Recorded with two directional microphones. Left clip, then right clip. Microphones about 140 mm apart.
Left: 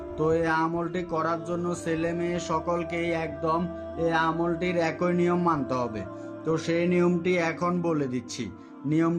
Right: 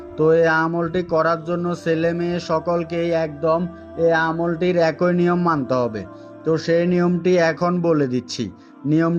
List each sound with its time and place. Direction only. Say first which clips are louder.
0.2 s speech: right 9 dB; 45° right (ahead or behind)